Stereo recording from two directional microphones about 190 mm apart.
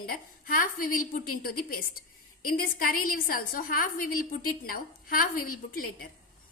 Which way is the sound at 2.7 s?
50° left (ahead or behind).